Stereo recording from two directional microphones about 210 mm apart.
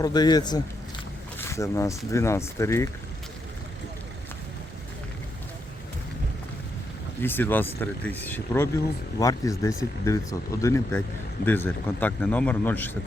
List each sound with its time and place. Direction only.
0.0 s a man's voice: 20° left (ahead or behind)
7.2 s speech: 10° left (ahead or behind)